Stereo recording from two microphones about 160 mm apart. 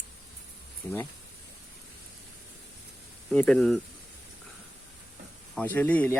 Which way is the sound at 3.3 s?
5° left (ahead or behind).